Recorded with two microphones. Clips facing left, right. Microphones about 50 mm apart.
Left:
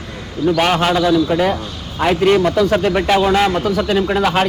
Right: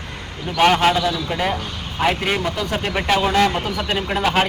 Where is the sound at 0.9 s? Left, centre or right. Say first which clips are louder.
Left 7 dB; centre.